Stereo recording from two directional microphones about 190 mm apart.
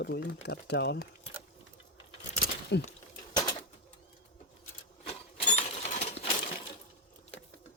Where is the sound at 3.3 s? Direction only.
20° left (ahead or behind).